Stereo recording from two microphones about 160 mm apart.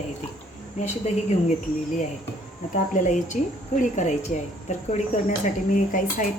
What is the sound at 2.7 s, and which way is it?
A woman's voice, 55° left (ahead or behind).